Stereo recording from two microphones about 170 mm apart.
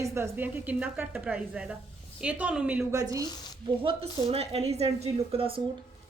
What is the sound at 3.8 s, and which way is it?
A woman's voice, 35° right (ahead or behind).